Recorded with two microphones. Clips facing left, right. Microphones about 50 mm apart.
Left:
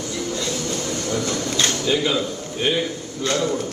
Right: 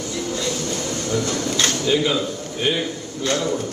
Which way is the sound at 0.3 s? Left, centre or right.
Right.